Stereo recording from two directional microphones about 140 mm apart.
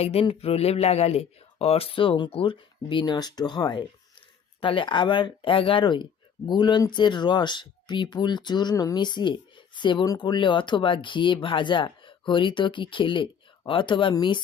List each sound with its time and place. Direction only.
0.0 s speech: 45° left (ahead or behind)